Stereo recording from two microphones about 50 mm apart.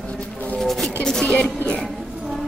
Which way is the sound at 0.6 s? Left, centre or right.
Centre.